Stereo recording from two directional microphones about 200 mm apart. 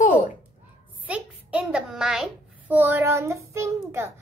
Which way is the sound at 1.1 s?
5° right (ahead or behind).